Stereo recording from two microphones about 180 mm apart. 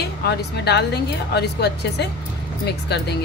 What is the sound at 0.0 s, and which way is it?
A woman's voice, 65° left (ahead or behind).